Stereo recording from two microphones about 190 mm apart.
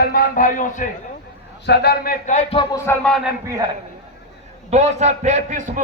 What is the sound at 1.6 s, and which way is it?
Speech, 60° left (ahead or behind).